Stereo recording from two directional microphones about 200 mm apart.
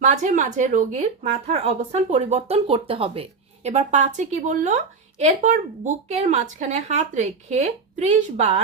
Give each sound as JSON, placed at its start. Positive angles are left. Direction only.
{"t": 0.0, "sound": "speech", "side_deg": -35}